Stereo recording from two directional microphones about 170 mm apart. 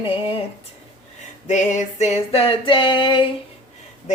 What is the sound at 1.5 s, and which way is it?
Female singing, 45° left (ahead or behind).